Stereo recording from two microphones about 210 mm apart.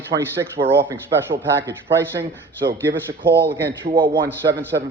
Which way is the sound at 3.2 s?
50° right (ahead or behind).